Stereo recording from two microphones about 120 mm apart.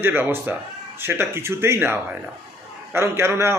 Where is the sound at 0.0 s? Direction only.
15° right (ahead or behind).